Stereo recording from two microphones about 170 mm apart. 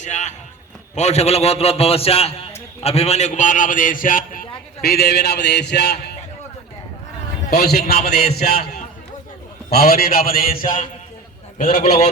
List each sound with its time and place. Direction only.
0.0 s a man's voice: 45° left (ahead or behind); by 6.1 s 75° left (ahead or behind)
7.5 s a man's voice: 65° left (ahead or behind)
9.6 s a man's voice: 65° left (ahead or behind); by 12.1 s 35° left (ahead or behind)